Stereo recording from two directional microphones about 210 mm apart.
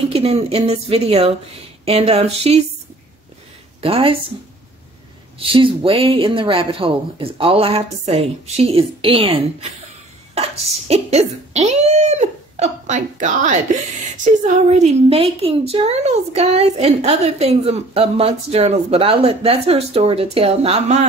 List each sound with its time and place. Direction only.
0.1 s a woman's voice: 30° right (ahead or behind)
3.8 s a woman's voice: 25° right (ahead or behind)
5.5 s a woman's voice: 25° right (ahead or behind)